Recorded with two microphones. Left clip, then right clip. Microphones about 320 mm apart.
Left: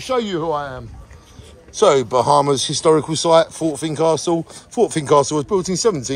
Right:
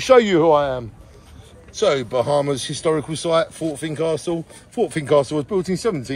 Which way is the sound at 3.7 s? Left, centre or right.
Left.